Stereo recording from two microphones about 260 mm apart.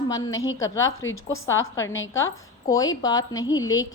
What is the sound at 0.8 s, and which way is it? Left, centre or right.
Speech, left.